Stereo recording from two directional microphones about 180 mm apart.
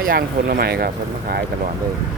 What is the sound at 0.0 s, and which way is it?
Speech, 55° right (ahead or behind).